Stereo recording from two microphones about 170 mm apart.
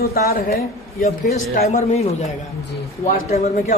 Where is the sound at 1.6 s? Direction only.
40° left (ahead or behind).